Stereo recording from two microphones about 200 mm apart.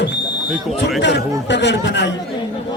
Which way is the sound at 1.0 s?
60° left (ahead or behind).